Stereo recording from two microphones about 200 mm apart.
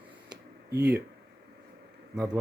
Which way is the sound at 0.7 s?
55° right (ahead or behind).